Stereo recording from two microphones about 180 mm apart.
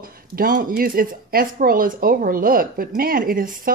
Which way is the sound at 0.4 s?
50° right (ahead or behind).